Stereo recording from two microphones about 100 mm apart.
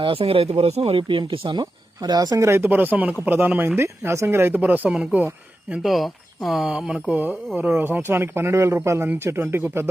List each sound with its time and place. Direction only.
0.0 s speech: 65° right (ahead or behind)
2.0 s speech: 40° right (ahead or behind)
2.5 s speech: 20° right (ahead or behind)
5.7 s speech: centre (ahead or behind); by 9.8 s 25° right (ahead or behind)